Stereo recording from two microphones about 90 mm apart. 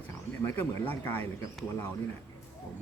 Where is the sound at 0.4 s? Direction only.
20° left (ahead or behind).